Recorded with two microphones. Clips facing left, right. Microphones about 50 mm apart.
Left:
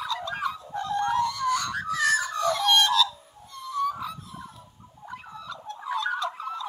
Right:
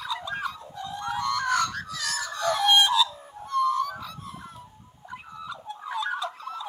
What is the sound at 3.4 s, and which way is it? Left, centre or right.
Whale vocalization, right.